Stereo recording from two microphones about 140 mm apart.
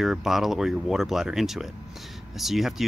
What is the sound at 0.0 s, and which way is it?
Speech, centre (ahead or behind).